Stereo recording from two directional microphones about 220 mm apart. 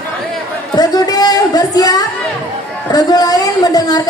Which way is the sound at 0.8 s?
15° left (ahead or behind).